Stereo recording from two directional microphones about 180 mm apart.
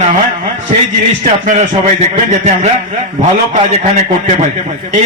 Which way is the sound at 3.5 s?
40° right (ahead or behind).